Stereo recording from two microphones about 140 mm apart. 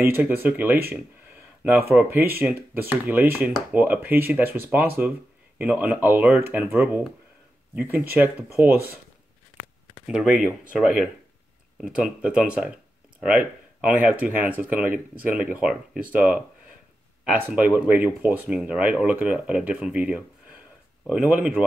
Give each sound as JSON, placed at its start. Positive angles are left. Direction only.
{"t": 0.0, "sound": "speech", "side_deg": -15}
{"t": 1.9, "sound": "speech", "side_deg": -15}
{"t": 3.3, "sound": "speech", "side_deg": 0}
{"t": 3.7, "sound": "speech", "side_deg": -10}
{"t": 10.0, "sound": "speech", "side_deg": -5}